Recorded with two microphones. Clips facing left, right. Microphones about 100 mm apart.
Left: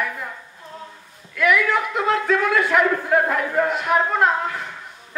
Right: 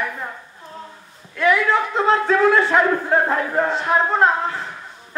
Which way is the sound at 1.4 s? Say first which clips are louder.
Right 2 dB; 30° right (ahead or behind).